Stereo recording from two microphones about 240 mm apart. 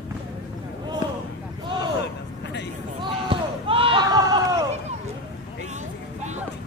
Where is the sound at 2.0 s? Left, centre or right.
Left.